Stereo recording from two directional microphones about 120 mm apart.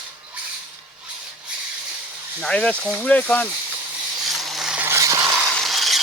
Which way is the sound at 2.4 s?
10° left (ahead or behind).